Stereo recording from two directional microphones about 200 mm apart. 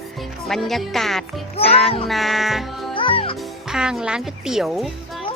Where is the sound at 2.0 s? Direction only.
Centre (ahead or behind).